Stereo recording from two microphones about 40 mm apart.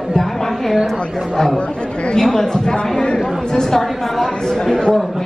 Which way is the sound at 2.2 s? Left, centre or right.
Centre.